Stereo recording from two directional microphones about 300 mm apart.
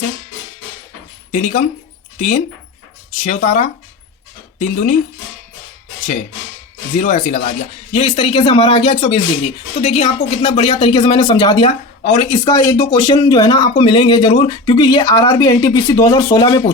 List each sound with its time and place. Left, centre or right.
1.3 s speech: left
3.2 s speech: left
6.9 s speech: left